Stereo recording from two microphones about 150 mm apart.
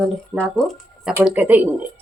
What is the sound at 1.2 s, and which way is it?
Speech, 10° right (ahead or behind).